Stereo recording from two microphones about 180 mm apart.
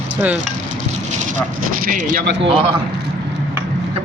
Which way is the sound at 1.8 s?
50° right (ahead or behind).